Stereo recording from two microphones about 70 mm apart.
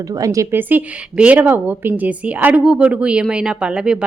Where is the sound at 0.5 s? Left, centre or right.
Right.